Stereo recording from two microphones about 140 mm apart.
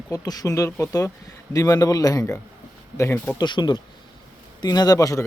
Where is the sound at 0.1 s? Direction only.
25° left (ahead or behind).